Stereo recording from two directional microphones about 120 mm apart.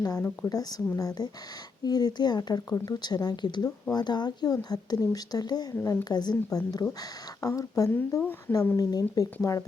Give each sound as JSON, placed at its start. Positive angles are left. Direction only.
{"t": 0.0, "sound": "speech", "side_deg": 30}
{"t": 5.7, "sound": "speech", "side_deg": 20}
{"t": 8.2, "sound": "speech", "side_deg": 15}
{"t": 8.7, "sound": "speech", "side_deg": 30}